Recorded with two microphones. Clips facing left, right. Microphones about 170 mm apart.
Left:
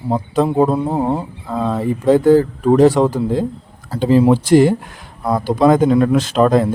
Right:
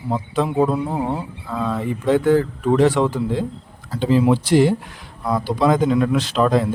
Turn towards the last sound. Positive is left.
turn(degrees=45)  # may be behind; listen again after turning